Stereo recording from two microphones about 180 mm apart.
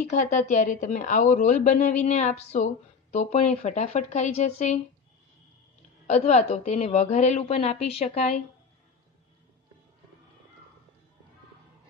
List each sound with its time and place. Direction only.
0.1 s a woman's voice: 45° left (ahead or behind)
6.0 s a woman's voice: 40° left (ahead or behind)